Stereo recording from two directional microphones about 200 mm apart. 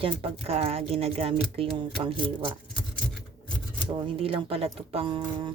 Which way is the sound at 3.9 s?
25° right (ahead or behind).